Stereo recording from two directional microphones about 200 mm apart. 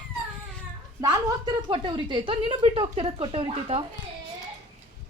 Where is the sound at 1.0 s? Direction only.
15° right (ahead or behind).